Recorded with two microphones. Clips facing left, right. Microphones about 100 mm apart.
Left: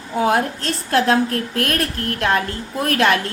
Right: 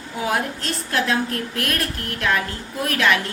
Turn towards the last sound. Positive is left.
turn(degrees=45)  # may be behind; listen again after turning